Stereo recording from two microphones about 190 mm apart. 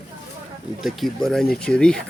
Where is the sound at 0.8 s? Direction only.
Centre (ahead or behind).